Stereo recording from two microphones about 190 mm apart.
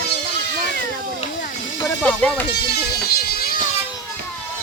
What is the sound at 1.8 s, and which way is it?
Speech, 10° left (ahead or behind).